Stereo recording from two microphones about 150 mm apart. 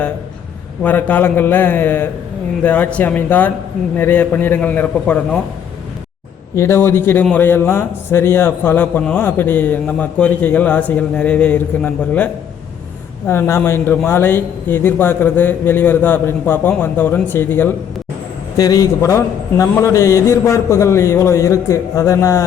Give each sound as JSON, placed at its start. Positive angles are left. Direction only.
{"t": 0.8, "sound": "a man's voice", "side_deg": 10}
{"t": 6.6, "sound": "a man's voice", "side_deg": 15}
{"t": 18.5, "sound": "a man's voice", "side_deg": 25}